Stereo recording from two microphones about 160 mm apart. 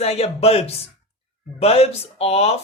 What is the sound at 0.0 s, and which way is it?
Speech, 40° left (ahead or behind).